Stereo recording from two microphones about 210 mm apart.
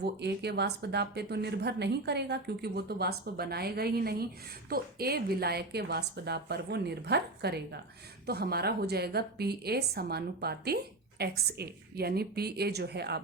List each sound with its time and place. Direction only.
0.0 s speech: 50° right (ahead or behind)